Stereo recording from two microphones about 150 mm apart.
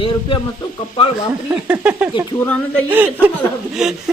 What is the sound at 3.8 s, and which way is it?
Speech, 5° right (ahead or behind).